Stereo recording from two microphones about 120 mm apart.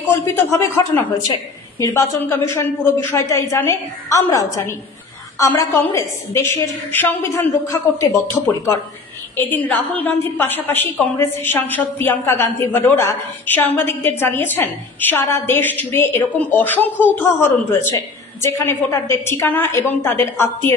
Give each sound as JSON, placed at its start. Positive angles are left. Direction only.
{"t": 0.3, "sound": "a woman's voice", "side_deg": 20}
{"t": 9.4, "sound": "a woman's voice", "side_deg": 15}